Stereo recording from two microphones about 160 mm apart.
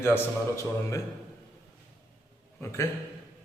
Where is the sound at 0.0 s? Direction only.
15° left (ahead or behind).